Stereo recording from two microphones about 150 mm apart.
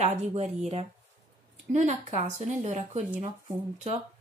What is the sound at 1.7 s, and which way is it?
A woman's voice, 50° right (ahead or behind).